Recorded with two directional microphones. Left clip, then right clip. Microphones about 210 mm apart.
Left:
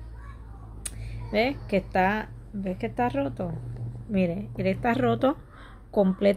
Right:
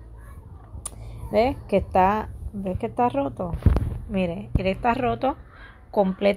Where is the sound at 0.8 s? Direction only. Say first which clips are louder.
Right 2 dB; 10° right (ahead or behind).